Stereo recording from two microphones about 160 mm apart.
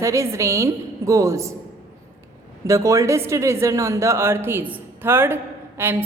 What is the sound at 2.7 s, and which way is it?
Speech, 20° right (ahead or behind).